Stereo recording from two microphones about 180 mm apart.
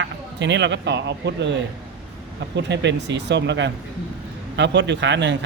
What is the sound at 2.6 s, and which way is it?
A man's voice, 75° right (ahead or behind).